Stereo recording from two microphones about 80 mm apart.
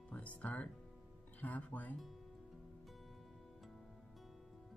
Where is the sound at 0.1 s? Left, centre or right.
Centre.